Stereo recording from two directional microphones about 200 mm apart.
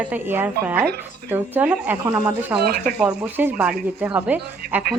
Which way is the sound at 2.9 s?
5° right (ahead or behind).